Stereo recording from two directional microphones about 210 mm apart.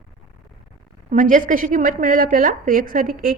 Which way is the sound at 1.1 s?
40° right (ahead or behind).